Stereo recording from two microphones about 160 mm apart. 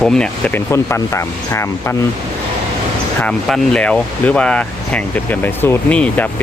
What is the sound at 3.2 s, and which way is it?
Speech, 5° left (ahead or behind).